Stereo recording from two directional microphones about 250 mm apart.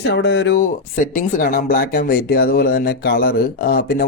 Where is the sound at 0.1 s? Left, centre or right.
Left.